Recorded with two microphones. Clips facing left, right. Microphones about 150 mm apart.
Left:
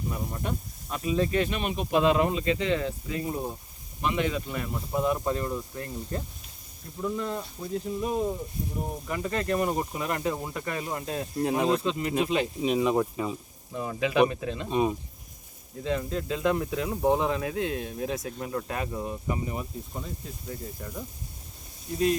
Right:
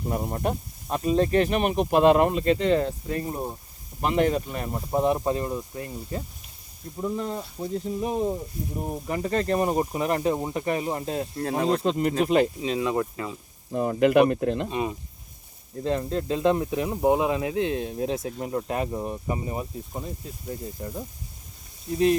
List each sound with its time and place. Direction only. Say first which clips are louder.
0.1 s speech: right 8 dB; 50° right (ahead or behind)
5.0 s speech: right 2 dB; 25° right (ahead or behind)
6.1 s speech: right 1 dB; 5° right (ahead or behind)
7.0 s speech: right 1 dB; 25° right (ahead or behind)
9.0 s speech: right 4 dB; 35° right (ahead or behind)
11.4 s speech: even; 10° left (ahead or behind)
11.8 s speech: right 4 dB; 45° right (ahead or behind)
12.6 s speech: left 1 dB; 15° left (ahead or behind)
13.7 s speech: right 5 dB; 50° right (ahead or behind)
14.7 s speech: left 3 dB; 15° left (ahead or behind)
15.8 s speech: right 3 dB; 40° right (ahead or behind)
16.4 s speech: right 4 dB; 25° right (ahead or behind)